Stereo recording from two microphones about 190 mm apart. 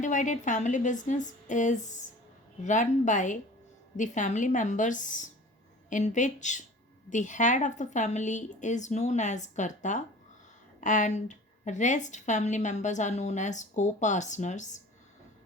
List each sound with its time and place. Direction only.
0.0 s a woman's voice: 40° left (ahead or behind)